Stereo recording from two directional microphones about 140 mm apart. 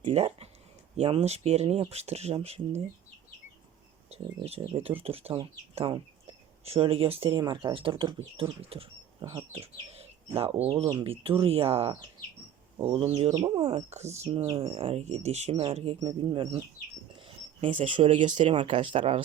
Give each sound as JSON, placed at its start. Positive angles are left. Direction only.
{"t": 0.0, "sound": "speech", "side_deg": -45}
{"t": 4.1, "sound": "bird", "side_deg": -50}
{"t": 4.6, "sound": "speech", "side_deg": -40}
{"t": 13.3, "sound": "speech", "side_deg": -30}
{"t": 13.7, "sound": "speech", "side_deg": -45}
{"t": 16.0, "sound": "speech", "side_deg": -35}
{"t": 17.2, "sound": "a sound", "side_deg": -40}
{"t": 17.9, "sound": "speech", "side_deg": -35}